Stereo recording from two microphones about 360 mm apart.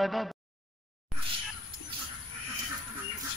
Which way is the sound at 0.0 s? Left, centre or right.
Centre.